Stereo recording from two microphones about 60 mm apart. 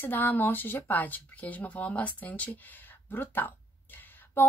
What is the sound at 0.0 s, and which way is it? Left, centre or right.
A woman's voice, left.